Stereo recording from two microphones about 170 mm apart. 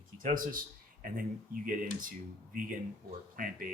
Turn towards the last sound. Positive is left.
turn(degrees=-55)  # may be behind; listen again after turning